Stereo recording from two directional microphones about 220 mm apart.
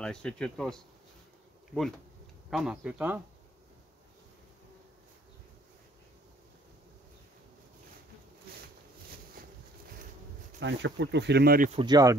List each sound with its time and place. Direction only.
0.0 s speech: 5° left (ahead or behind)
10.6 s speech: 55° right (ahead or behind)
11.7 s speech: 20° right (ahead or behind)